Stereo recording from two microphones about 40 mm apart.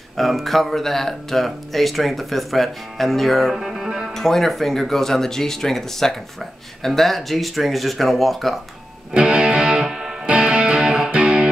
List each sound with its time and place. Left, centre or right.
0.2 s speech: centre
3.5 s music: centre
4.1 s speech: centre
9.1 s music: right
9.8 s music: centre
10.2 s music: right
11.1 s music: right